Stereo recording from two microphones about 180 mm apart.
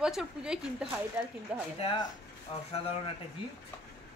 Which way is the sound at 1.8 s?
30° left (ahead or behind).